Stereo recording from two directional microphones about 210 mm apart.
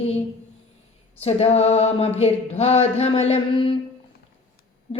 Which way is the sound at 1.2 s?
30° left (ahead or behind).